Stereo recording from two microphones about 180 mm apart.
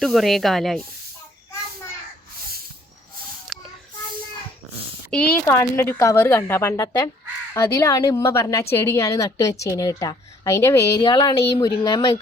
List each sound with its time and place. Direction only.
0.0 s speech: centre (ahead or behind)
3.5 s a sound: 5° left (ahead or behind)
5.1 s a woman's voice: 5° left (ahead or behind); by 12.2 s 20° left (ahead or behind)